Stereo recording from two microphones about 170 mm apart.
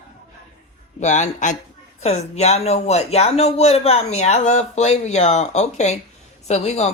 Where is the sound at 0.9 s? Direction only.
45° left (ahead or behind).